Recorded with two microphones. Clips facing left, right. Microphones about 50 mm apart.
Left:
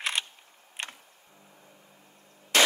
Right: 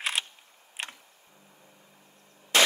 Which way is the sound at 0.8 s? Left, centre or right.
Centre.